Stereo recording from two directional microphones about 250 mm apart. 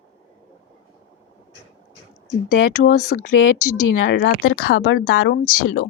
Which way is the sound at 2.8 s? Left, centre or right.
Left.